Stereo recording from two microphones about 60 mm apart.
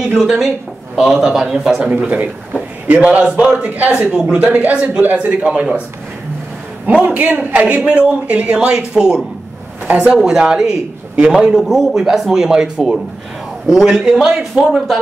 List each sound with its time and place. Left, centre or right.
0.2 s a man's voice: centre
1.8 s a man's voice: right
4.1 s a man's voice: centre
4.4 s a man's voice: right
6.9 s a man's voice: right
11.6 s a man's voice: centre